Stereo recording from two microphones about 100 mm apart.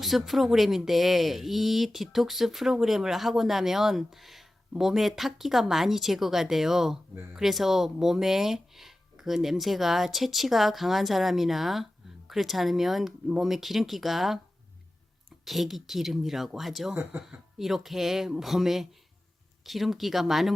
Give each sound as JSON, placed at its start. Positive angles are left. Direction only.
{"t": 0.0, "sound": "speech", "side_deg": 0}
{"t": 15.4, "sound": "speech", "side_deg": 0}
{"t": 16.9, "sound": "speech", "side_deg": -20}
{"t": 17.2, "sound": "speech", "side_deg": -5}